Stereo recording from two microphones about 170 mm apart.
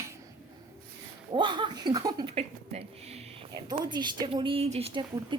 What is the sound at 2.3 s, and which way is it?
A woman's voice, 35° right (ahead or behind).